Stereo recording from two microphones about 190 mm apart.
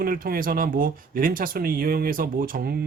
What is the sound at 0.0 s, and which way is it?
Speech, 50° right (ahead or behind).